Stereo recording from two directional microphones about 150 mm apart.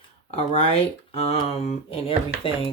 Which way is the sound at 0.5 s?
40° left (ahead or behind).